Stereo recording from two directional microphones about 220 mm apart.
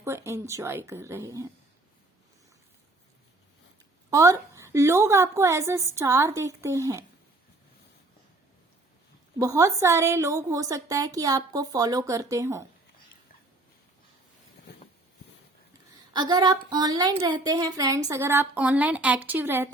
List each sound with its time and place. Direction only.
0.0 s a woman's voice: 10° right (ahead or behind)
4.1 s a woman's voice: 15° right (ahead or behind)
9.4 s a woman's voice: 15° right (ahead or behind)
16.1 s a woman's voice: 20° right (ahead or behind)